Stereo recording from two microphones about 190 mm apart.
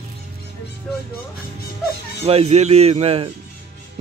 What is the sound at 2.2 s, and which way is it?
Speech, 30° right (ahead or behind).